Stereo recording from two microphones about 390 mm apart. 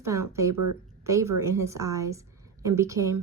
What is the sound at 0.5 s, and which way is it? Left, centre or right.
Speech, right.